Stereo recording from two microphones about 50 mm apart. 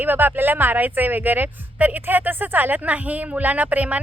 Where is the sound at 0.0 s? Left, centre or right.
Right.